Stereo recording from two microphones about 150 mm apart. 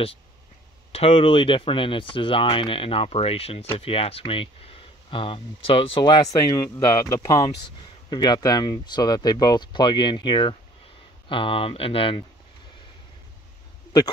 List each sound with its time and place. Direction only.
0.9 s speech: 40° left (ahead or behind)